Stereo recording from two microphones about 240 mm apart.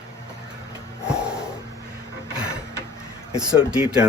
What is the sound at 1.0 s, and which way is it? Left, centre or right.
Snort, centre.